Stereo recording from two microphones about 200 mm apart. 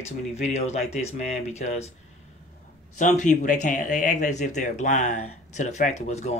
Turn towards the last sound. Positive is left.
turn(degrees=35)  # may be behind; listen again after turning